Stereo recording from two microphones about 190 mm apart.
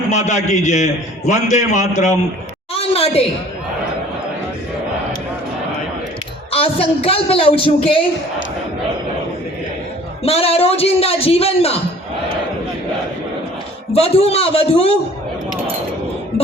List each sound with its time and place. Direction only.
0.1 s a man's voice: 40° left (ahead or behind)
2.7 s a sound: 30° left (ahead or behind)
6.5 s a man's voice: 30° left (ahead or behind)
10.2 s a man's voice: 30° left (ahead or behind)
13.9 s a man's voice: 30° left (ahead or behind)